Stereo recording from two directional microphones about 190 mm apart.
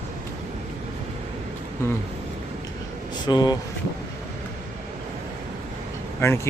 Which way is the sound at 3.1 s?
20° left (ahead or behind).